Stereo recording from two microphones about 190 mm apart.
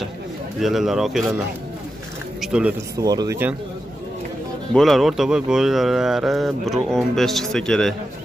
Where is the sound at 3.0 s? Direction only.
20° right (ahead or behind).